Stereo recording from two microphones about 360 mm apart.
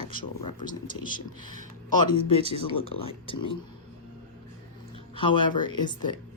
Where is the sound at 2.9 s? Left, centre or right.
Centre.